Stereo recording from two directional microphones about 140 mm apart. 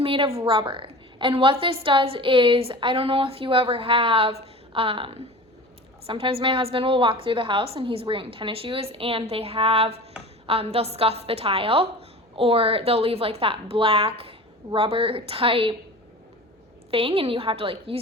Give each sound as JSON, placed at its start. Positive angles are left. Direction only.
{"t": 0.0, "sound": "a woman's voice", "side_deg": -40}
{"t": 16.9, "sound": "a woman's voice", "side_deg": -40}